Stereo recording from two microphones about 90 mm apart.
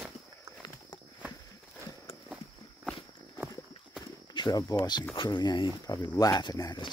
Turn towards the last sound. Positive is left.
turn(degrees=50)  # may be behind; listen again after turning